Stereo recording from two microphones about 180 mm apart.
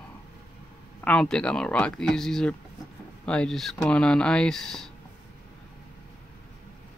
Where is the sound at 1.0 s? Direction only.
5° left (ahead or behind).